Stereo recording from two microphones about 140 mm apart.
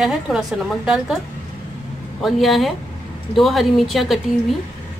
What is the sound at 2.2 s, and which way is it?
A woman's voice, centre (ahead or behind).